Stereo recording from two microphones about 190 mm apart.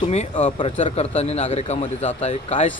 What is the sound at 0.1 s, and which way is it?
A man's voice, 35° left (ahead or behind).